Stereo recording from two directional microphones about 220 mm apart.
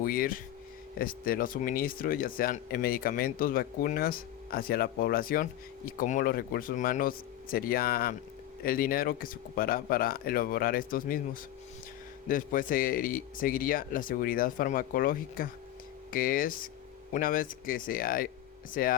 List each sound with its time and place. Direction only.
0.0 s speech: 40° left (ahead or behind)
12.3 s speech: 40° left (ahead or behind)